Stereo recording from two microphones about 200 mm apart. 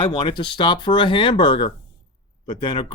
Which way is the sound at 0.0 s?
25° left (ahead or behind).